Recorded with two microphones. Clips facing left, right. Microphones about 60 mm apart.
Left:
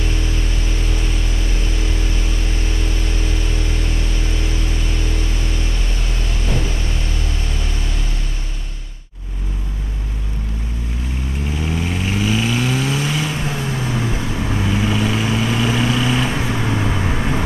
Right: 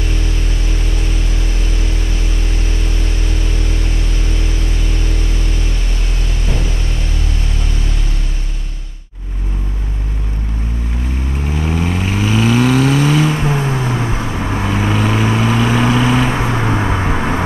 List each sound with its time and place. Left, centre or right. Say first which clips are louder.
11.5 s vehicle: right 5 dB; right